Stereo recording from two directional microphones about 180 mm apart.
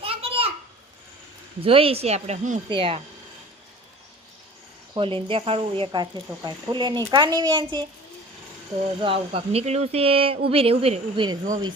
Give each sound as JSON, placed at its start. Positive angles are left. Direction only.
{"t": 0.0, "sound": "a sound", "side_deg": -30}
{"t": 1.6, "sound": "speech", "side_deg": -30}
{"t": 4.9, "sound": "speech", "side_deg": -30}
{"t": 9.0, "sound": "speech", "side_deg": -30}